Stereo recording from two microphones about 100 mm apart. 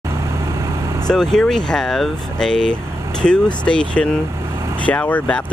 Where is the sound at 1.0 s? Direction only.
5° left (ahead or behind).